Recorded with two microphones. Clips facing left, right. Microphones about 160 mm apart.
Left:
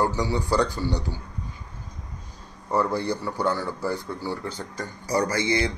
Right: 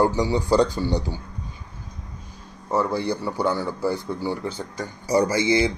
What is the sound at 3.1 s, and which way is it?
Speech, 10° right (ahead or behind).